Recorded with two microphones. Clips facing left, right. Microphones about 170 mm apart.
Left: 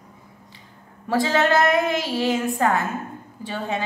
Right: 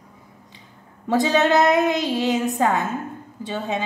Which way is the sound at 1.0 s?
20° right (ahead or behind).